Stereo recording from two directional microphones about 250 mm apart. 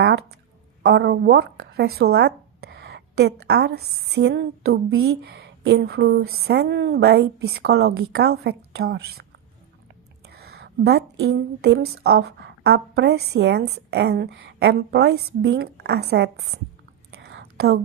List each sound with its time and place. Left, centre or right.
0.8 s speech: right
10.2 s speech: right
17.1 s whispering: right